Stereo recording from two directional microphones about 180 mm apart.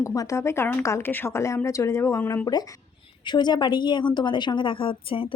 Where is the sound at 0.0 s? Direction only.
15° left (ahead or behind).